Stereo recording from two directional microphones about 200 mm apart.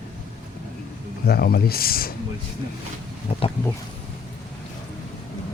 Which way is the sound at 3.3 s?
30° left (ahead or behind).